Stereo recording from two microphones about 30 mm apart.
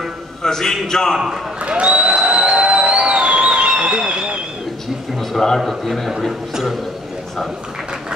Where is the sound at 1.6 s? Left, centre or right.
Right.